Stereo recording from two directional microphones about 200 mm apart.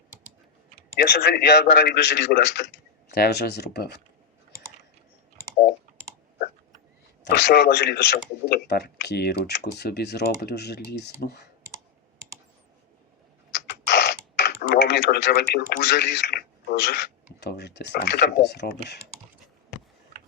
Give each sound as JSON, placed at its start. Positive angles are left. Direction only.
{"t": 0.9, "sound": "a man's voice", "side_deg": 50}
{"t": 7.3, "sound": "a man's voice", "side_deg": 55}
{"t": 13.7, "sound": "typing", "side_deg": 55}
{"t": 15.5, "sound": "a man's voice", "side_deg": 55}
{"t": 17.4, "sound": "a man's voice", "side_deg": 55}